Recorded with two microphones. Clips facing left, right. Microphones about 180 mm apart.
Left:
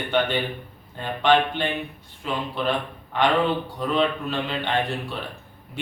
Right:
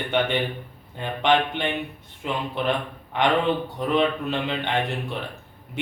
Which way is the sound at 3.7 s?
20° right (ahead or behind).